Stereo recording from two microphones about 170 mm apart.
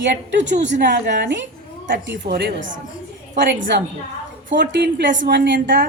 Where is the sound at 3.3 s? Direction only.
90° right.